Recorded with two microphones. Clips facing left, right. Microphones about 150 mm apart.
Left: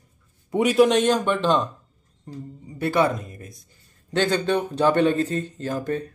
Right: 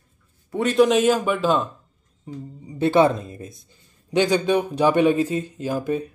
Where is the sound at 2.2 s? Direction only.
20° right (ahead or behind).